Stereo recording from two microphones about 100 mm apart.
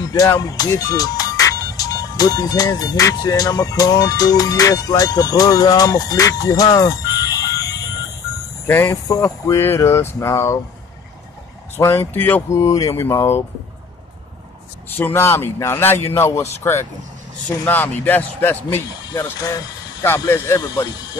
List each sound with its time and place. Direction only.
0.4 s speech: 40° left (ahead or behind)
11.8 s speech: 25° left (ahead or behind)
12.5 s speech: 35° left (ahead or behind)
15.0 s speech: 20° left (ahead or behind)
20.2 s speech: 30° left (ahead or behind)